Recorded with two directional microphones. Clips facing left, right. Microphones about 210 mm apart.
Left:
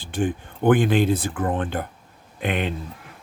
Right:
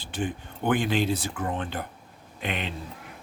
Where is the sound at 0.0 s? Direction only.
50° left (ahead or behind).